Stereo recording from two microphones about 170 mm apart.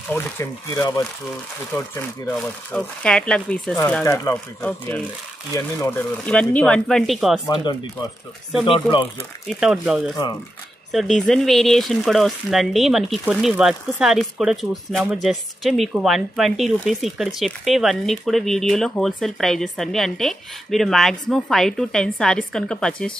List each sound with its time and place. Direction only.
0.1 s speech: 15° left (ahead or behind)
4.0 s speech: 15° left (ahead or behind); by 7.4 s centre (ahead or behind)
7.4 s speech: 25° left (ahead or behind)
9.5 s speech: 5° right (ahead or behind)